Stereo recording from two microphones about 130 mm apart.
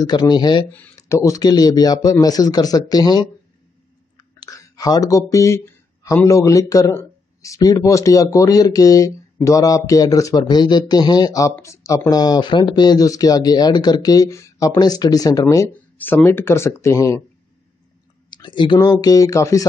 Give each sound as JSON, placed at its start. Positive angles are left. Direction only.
{"t": 0.0, "sound": "speech", "side_deg": 30}
{"t": 0.9, "sound": "a man's voice", "side_deg": 25}
{"t": 4.2, "sound": "clicking", "side_deg": 30}
{"t": 6.0, "sound": "a man's voice", "side_deg": 25}
{"t": 15.7, "sound": "a man's voice", "side_deg": 10}
{"t": 18.3, "sound": "a sound", "side_deg": 35}
{"t": 18.8, "sound": "a man's voice", "side_deg": 30}